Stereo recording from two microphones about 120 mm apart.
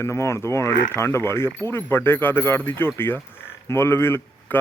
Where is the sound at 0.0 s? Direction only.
25° left (ahead or behind).